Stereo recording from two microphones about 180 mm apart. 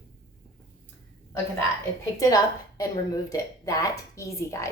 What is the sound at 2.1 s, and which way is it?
Speech, 20° left (ahead or behind).